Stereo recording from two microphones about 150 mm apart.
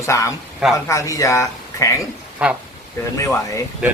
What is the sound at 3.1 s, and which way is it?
Speech, 20° left (ahead or behind).